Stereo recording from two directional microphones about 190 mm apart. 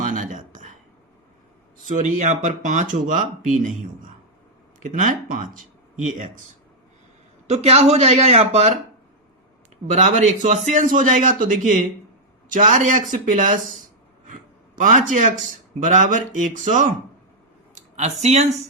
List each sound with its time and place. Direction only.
0.0 s a sound: 40° right (ahead or behind)
1.9 s a man's voice: 40° right (ahead or behind)
4.8 s speech: 40° right (ahead or behind)
7.4 s a man's voice: 35° right (ahead or behind)
9.8 s a man's voice: 40° right (ahead or behind)
14.8 s a man's voice: 40° right (ahead or behind)
17.7 s speech: 40° right (ahead or behind)